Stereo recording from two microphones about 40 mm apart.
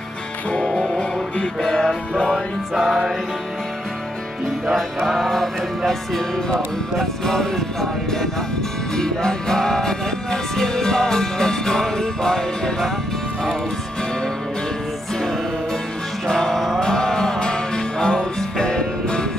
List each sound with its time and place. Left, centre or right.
0.7 s music: centre
2.2 s music: centre
4.7 s music: centre
7.0 s music: centre
16.3 s music: centre
16.5 s music: centre
16.8 s music: centre